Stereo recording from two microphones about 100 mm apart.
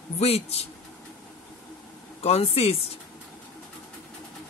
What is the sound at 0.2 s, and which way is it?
Speech, 90° left.